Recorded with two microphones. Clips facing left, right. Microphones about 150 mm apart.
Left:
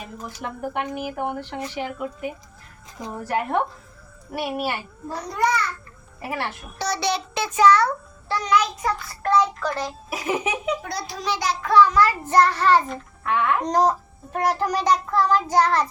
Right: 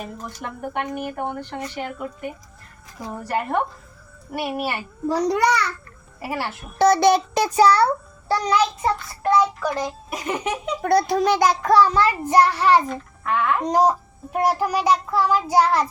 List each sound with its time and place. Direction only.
0.0 s speech: centre (ahead or behind)
5.0 s a child's voice: 85° right
6.2 s speech: 5° right (ahead or behind)
6.7 s a child's voice: 50° right (ahead or behind); by 8.9 s 35° right (ahead or behind)
9.2 s a child's voice: 10° right (ahead or behind)
10.1 s speech: 5° left (ahead or behind)
10.8 s a child's voice: 55° right (ahead or behind); by 12.1 s 30° right (ahead or behind)
12.2 s a child's voice: 10° right (ahead or behind)
12.9 s a child's voice: centre (ahead or behind)
13.6 s a child's voice: 10° right (ahead or behind)